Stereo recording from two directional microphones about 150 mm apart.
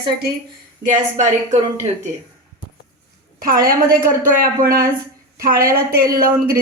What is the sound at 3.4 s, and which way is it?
Speech, 75° right (ahead or behind).